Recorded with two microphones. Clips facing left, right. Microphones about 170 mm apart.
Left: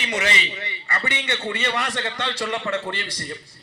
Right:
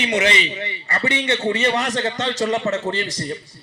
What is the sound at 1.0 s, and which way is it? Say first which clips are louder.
A man's voice: right 8 dB; 45° right (ahead or behind).